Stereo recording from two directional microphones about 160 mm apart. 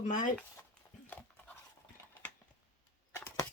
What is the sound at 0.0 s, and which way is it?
Speech, 55° left (ahead or behind).